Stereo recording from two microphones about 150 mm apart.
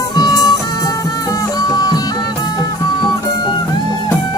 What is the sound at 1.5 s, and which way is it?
Music, 25° left (ahead or behind).